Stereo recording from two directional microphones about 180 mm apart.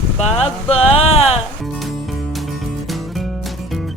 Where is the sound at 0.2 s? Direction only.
35° left (ahead or behind).